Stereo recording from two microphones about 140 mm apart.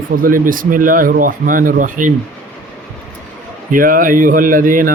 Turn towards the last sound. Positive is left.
turn(degrees=-75)  # may be behind; listen again after turning